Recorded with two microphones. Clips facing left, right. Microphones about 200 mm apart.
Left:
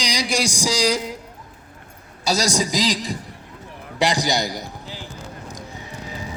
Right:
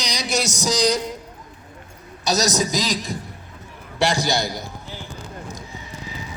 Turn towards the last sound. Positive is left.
turn(degrees=15)  # may be behind; listen again after turning